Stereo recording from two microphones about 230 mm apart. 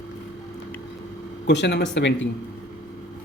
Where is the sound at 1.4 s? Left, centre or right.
Left.